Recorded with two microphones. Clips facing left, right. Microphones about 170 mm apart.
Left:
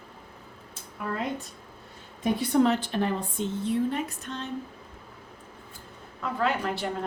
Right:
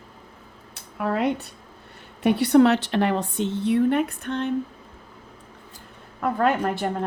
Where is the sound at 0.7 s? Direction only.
70° right (ahead or behind).